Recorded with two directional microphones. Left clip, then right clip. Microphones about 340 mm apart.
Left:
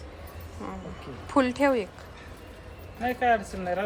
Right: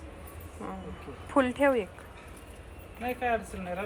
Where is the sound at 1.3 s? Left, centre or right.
Centre.